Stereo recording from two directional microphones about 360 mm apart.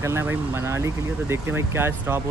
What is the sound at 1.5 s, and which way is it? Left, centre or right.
Speech, centre.